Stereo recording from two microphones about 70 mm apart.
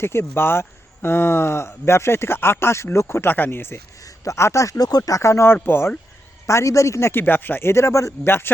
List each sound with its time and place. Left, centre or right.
0.0 s speech: left
4.0 s speech: left
4.8 s speech: left
6.5 s speech: left
7.1 s speech: left
8.3 s speech: left